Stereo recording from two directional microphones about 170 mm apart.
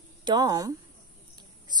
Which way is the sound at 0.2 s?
25° right (ahead or behind).